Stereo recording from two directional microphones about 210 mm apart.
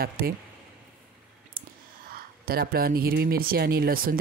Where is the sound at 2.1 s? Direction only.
45° right (ahead or behind).